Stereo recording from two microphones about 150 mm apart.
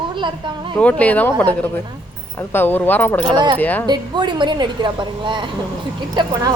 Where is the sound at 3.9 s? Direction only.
30° right (ahead or behind).